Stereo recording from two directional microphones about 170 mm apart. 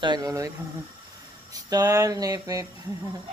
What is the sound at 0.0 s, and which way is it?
Speech, 25° right (ahead or behind).